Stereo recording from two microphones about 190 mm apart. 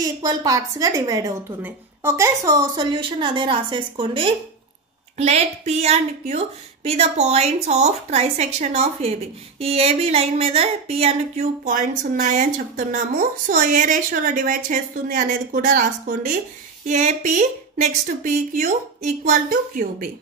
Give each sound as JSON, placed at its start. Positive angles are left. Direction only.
{"t": 0.0, "sound": "a woman's voice", "side_deg": -20}